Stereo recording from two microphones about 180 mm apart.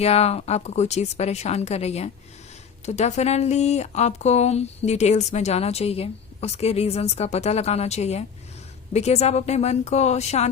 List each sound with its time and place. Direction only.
0.0 s speech: 35° left (ahead or behind)